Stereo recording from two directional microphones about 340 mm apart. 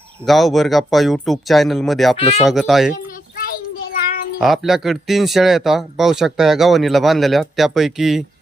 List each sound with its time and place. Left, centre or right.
0.3 s speech: centre
2.1 s speech: centre
2.4 s speech: centre
4.4 s speech: centre